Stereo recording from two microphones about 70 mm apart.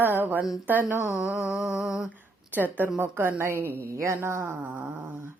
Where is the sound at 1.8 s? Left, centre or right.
Centre.